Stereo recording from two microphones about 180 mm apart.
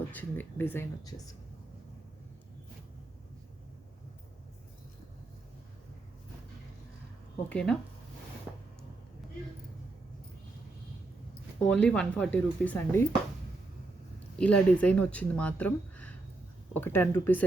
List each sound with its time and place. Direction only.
0.1 s speech: 10° left (ahead or behind)
7.5 s speech: 5° left (ahead or behind)
11.6 s speech: 5° left (ahead or behind)
14.3 s speech: 5° left (ahead or behind)